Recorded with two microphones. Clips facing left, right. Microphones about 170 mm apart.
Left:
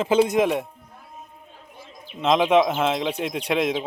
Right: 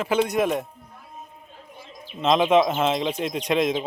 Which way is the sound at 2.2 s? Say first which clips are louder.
Even; 10° left (ahead or behind).